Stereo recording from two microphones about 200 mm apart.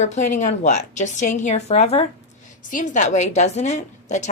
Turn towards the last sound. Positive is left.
turn(degrees=35)  # may be behind; listen again after turning